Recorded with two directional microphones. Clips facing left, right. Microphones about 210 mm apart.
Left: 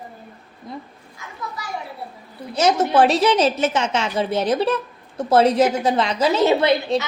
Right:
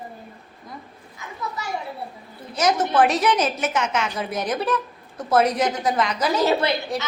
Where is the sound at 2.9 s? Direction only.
30° left (ahead or behind).